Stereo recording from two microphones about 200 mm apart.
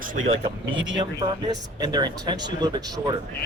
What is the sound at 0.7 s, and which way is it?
Speech, 70° right (ahead or behind).